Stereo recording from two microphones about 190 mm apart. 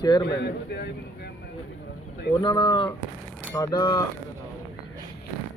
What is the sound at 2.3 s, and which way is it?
Speech, 25° left (ahead or behind).